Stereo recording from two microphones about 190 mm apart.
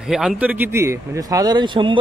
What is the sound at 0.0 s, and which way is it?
Speech, centre (ahead or behind).